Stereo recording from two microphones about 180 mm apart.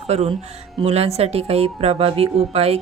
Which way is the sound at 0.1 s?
35° right (ahead or behind).